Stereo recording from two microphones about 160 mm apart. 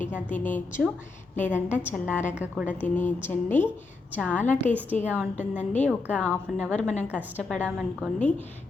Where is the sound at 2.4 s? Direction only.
10° right (ahead or behind).